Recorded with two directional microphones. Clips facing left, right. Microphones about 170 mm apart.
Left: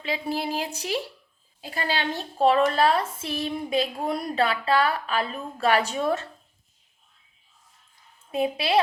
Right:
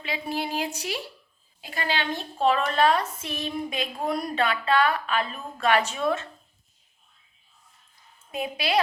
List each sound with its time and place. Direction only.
0.0 s a woman's voice: 35° left (ahead or behind)
8.3 s a woman's voice: 30° left (ahead or behind)